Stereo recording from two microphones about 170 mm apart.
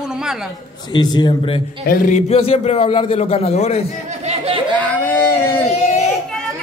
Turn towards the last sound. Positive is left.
turn(degrees=40)  # may be behind; listen again after turning